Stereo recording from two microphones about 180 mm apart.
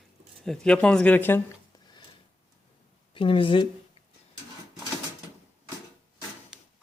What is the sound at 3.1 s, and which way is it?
Speech, 30° left (ahead or behind).